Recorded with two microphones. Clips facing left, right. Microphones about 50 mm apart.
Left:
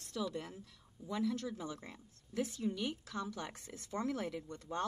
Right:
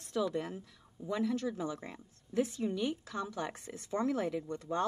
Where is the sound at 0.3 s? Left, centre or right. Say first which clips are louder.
Right 7 dB; right.